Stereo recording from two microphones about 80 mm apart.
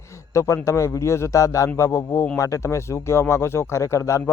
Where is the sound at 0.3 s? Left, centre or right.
Left.